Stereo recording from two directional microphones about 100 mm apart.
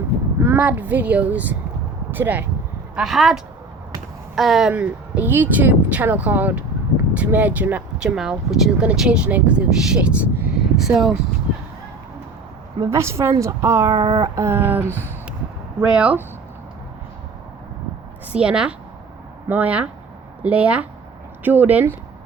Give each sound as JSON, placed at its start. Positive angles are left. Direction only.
{"t": 0.3, "sound": "speech", "side_deg": -25}
{"t": 2.9, "sound": "speech", "side_deg": 0}
{"t": 4.7, "sound": "speech", "side_deg": -15}
{"t": 12.8, "sound": "a sound", "side_deg": -30}
{"t": 13.4, "sound": "speech", "side_deg": -30}
{"t": 13.9, "sound": "child singing", "side_deg": -70}
{"t": 14.2, "sound": "a sound", "side_deg": -30}
{"t": 14.8, "sound": "a sound", "side_deg": 20}
{"t": 15.8, "sound": "speech", "side_deg": -10}
{"t": 18.3, "sound": "a woman's voice", "side_deg": -10}